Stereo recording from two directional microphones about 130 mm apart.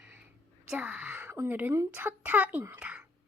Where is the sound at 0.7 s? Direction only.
10° right (ahead or behind).